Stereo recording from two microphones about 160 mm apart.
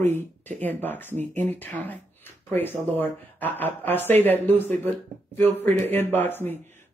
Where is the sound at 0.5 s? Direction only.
10° left (ahead or behind).